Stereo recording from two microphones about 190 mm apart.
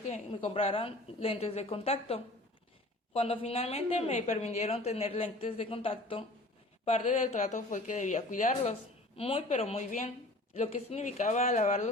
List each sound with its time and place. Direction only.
0.1 s a woman's voice: 30° left (ahead or behind)
9.1 s a woman's voice: 30° left (ahead or behind)